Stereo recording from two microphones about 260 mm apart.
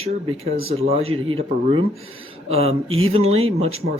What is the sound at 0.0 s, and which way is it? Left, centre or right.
Speech, right.